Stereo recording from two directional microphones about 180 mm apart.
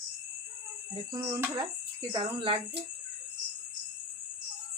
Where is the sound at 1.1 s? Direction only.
20° right (ahead or behind).